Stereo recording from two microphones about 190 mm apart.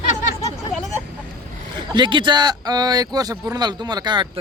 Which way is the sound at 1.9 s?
25° right (ahead or behind).